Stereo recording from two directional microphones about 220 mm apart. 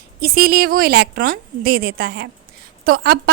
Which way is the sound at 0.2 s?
45° right (ahead or behind).